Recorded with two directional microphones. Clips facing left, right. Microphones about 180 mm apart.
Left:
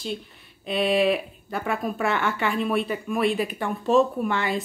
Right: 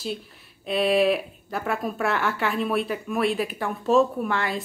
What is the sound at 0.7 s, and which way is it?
A woman's voice, centre (ahead or behind).